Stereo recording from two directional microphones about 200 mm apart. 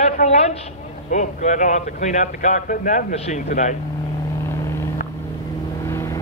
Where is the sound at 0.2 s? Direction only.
40° left (ahead or behind).